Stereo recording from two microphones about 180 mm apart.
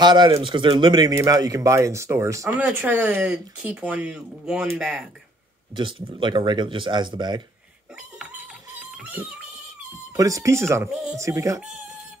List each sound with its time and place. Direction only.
0.0 s speech: 25° right (ahead or behind); by 5.0 s 5° right (ahead or behind)
5.8 s speech: 30° right (ahead or behind)
8.9 s music: 10° right (ahead or behind)
10.1 s speech: 20° right (ahead or behind)